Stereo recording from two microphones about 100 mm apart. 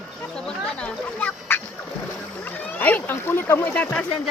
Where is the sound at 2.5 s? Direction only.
20° left (ahead or behind).